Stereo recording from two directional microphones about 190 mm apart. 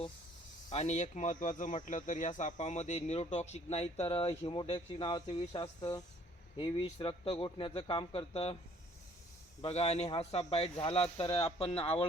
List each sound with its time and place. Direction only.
0.7 s speech: 35° left (ahead or behind)
9.6 s speech: 35° left (ahead or behind)